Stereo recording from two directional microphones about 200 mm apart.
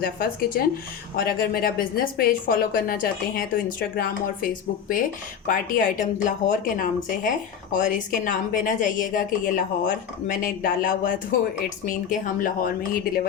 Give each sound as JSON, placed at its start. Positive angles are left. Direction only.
{"t": 0.0, "sound": "a woman's voice", "side_deg": 45}
{"t": 5.5, "sound": "a woman's voice", "side_deg": 40}